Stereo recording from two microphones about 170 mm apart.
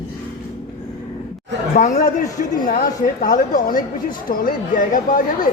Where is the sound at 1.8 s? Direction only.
50° left (ahead or behind).